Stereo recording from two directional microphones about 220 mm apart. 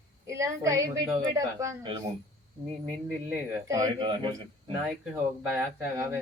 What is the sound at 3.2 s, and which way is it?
Speech, 15° right (ahead or behind).